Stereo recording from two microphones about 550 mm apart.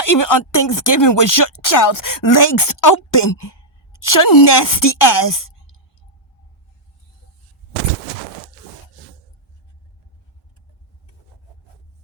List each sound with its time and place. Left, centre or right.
0.0 s speech: left